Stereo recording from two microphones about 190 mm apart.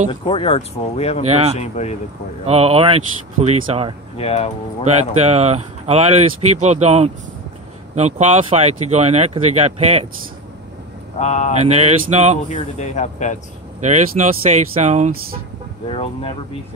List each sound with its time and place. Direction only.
0.1 s speech: 30° left (ahead or behind)
1.2 s speech: 35° right (ahead or behind)
1.6 s speech: 35° left (ahead or behind)
2.4 s speech: 30° right (ahead or behind)
4.2 s speech: 35° left (ahead or behind)
5.2 s speech: 35° right (ahead or behind)
11.1 s speech: 35° left (ahead or behind)
11.6 s speech: 35° right (ahead or behind)
12.5 s speech: 40° left (ahead or behind)
13.7 s speech: 40° right (ahead or behind)
15.9 s speech: 30° left (ahead or behind)